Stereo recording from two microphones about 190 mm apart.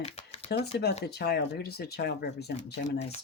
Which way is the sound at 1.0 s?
55° left (ahead or behind).